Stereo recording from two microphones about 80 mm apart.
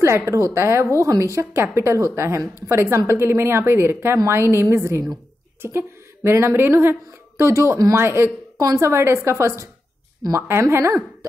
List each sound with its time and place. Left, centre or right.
0.0 s a woman's voice: right
8.5 s a woman's voice: right